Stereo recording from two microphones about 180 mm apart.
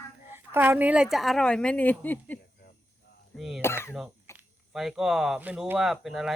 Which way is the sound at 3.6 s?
15° left (ahead or behind).